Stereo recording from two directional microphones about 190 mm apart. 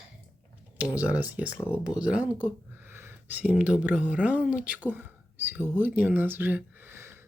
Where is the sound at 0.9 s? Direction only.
5° right (ahead or behind).